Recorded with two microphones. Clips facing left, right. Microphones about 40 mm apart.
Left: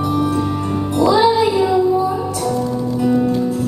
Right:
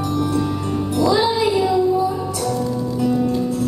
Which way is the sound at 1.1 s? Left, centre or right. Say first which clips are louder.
Left 4 dB; centre.